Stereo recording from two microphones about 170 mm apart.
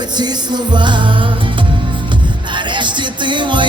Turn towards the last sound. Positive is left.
turn(degrees=-25)  # may be behind; listen again after turning